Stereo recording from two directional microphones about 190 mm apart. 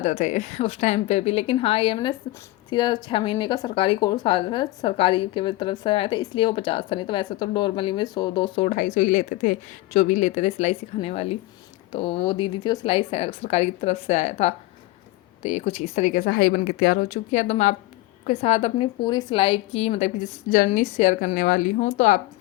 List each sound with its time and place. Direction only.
0.0 s a woman's voice: 40° left (ahead or behind)
8.6 s a woman's voice: 40° left (ahead or behind)
17.1 s a woman's voice: 35° left (ahead or behind)